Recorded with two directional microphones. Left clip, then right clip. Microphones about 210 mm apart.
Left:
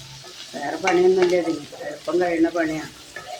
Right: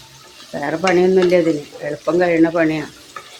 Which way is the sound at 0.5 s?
45° right (ahead or behind).